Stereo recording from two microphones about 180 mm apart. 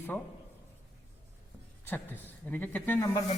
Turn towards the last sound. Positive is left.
turn(degrees=15)  # may be behind; listen again after turning